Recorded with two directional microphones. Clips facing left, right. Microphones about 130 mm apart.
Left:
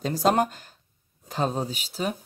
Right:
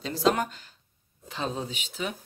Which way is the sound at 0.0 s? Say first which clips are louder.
Left 3 dB; 45° left (ahead or behind).